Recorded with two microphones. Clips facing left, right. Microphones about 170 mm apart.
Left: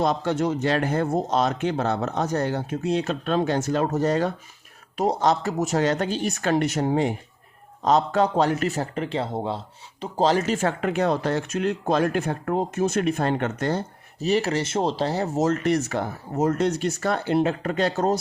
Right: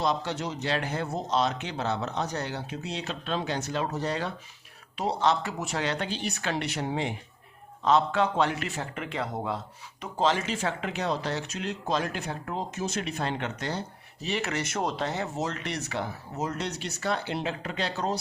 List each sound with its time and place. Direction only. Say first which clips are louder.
0.0 s speech: left 6 dB; 50° left (ahead or behind)